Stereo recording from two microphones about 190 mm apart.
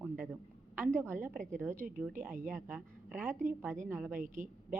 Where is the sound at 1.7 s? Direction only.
45° right (ahead or behind).